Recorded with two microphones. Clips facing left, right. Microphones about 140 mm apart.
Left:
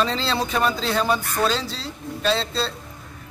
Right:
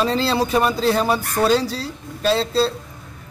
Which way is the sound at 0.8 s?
40° right (ahead or behind).